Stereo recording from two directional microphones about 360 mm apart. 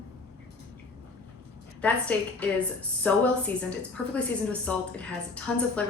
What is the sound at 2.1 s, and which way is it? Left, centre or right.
Speech, centre.